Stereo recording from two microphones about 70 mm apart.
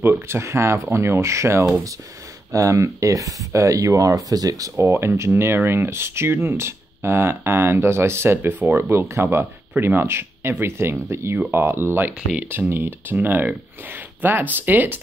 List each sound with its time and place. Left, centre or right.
0.3 s speech: right
4.8 s speech: right